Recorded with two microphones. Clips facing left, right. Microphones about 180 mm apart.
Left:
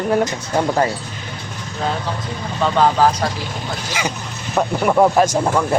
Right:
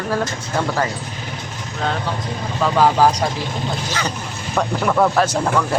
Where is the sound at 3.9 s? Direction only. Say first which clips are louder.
Even; 10° left (ahead or behind).